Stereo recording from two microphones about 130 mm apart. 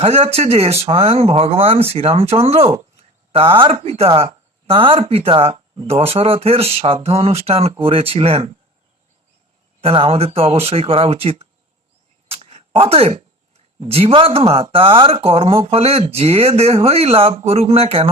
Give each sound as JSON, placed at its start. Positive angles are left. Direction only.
{"t": 0.0, "sound": "speech", "side_deg": -50}
{"t": 9.8, "sound": "speech", "side_deg": -45}